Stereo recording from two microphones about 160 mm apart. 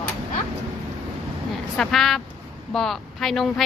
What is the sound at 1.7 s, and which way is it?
Speech, 5° left (ahead or behind).